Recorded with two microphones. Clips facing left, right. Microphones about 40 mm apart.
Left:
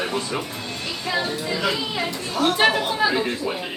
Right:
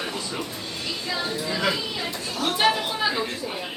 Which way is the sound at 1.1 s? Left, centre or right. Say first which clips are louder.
Left 4 dB; left.